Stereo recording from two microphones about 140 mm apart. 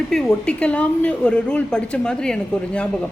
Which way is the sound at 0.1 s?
5° left (ahead or behind).